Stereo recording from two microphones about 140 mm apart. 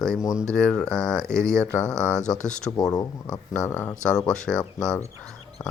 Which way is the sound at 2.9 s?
25° left (ahead or behind).